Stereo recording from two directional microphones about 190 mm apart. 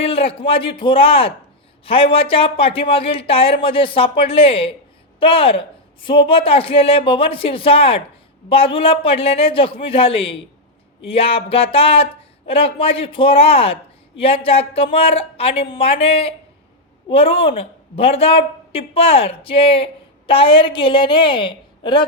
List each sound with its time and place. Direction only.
0.0 s speech: 30° left (ahead or behind)